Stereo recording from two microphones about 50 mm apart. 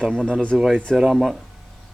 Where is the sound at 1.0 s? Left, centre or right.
Centre.